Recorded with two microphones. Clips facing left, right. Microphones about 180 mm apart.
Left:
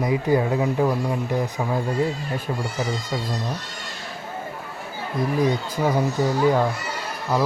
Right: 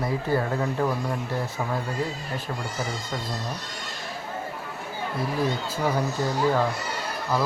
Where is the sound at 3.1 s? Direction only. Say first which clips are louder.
Left 4 dB; 10° left (ahead or behind).